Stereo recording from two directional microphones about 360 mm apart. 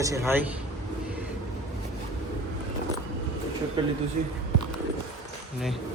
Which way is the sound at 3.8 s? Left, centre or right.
Centre.